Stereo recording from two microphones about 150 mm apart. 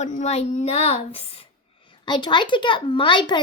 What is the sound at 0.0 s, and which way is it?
A woman's voice, 45° left (ahead or behind).